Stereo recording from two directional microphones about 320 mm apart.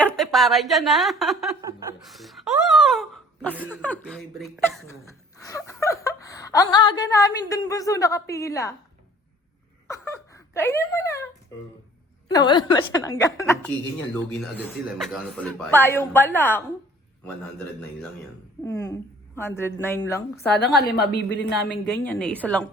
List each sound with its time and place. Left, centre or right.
0.0 s a woman's voice: centre
9.8 s a sound: centre
10.3 s speech: centre
12.3 s a woman's voice: centre
18.6 s a woman's voice: centre
21.0 s a woman's voice: left
21.7 s a man's voice: centre